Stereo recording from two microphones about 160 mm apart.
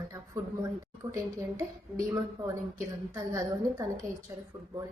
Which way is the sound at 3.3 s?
20° right (ahead or behind).